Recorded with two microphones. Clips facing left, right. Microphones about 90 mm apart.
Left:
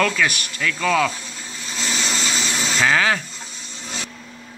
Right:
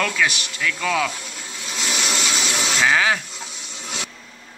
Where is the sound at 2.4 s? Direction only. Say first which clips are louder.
Even; 75° right (ahead or behind).